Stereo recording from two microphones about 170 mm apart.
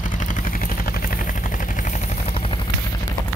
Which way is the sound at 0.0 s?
50° left (ahead or behind).